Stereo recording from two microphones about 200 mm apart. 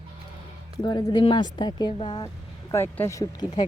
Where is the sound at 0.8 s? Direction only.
20° left (ahead or behind).